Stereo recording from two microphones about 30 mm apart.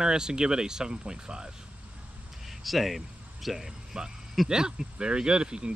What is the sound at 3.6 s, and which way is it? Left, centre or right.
Speech, centre.